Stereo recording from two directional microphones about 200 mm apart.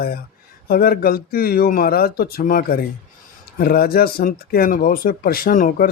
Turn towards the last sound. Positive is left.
turn(degrees=45)  # may be behind; listen again after turning